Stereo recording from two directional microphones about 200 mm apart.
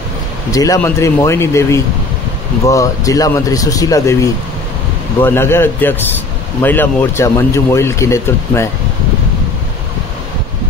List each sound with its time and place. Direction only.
0.5 s speech: 15° left (ahead or behind)